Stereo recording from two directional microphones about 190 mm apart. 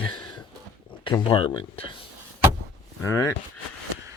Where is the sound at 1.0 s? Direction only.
25° left (ahead or behind).